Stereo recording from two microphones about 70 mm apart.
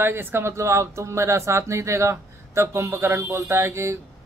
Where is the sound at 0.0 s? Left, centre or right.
Right.